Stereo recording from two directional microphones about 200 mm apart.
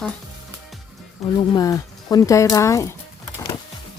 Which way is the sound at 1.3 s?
20° left (ahead or behind).